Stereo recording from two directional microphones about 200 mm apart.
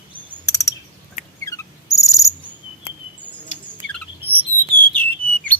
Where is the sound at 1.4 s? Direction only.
15° left (ahead or behind).